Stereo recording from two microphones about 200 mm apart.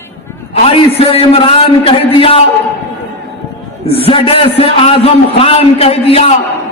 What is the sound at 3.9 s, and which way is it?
A man's voice, 30° left (ahead or behind).